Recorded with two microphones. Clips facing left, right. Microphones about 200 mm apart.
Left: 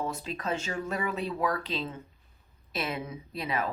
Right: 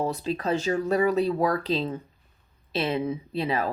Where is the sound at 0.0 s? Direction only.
35° right (ahead or behind).